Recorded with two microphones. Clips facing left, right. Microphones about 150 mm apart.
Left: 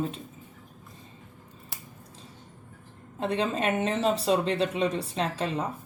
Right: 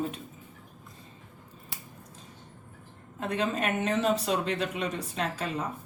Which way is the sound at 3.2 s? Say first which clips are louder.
Left 2 dB; 30° left (ahead or behind).